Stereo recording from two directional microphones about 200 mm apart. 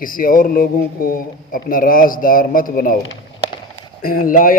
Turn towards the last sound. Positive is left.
turn(degrees=45)  # may be behind; listen again after turning